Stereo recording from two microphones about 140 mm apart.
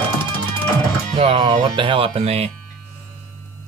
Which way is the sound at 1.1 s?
45° right (ahead or behind).